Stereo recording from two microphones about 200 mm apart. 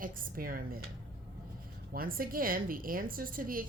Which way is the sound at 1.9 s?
45° right (ahead or behind).